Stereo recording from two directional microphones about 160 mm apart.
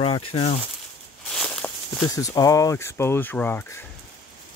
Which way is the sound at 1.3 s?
5° left (ahead or behind).